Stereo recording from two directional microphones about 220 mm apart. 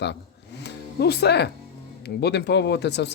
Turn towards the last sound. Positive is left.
turn(degrees=50)  # may be behind; listen again after turning